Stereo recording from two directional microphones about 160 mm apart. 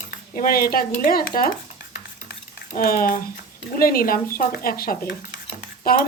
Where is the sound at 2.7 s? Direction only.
65° left (ahead or behind).